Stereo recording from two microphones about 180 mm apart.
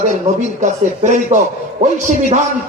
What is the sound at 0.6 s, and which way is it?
Speech, 40° right (ahead or behind).